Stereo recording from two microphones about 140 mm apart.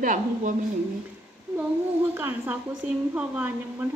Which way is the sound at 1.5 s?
15° right (ahead or behind).